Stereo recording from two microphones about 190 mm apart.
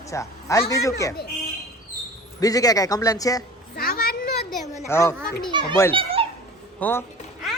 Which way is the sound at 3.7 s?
55° left (ahead or behind).